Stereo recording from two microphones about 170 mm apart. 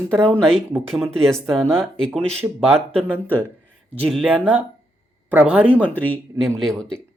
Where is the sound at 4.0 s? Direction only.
Centre (ahead or behind).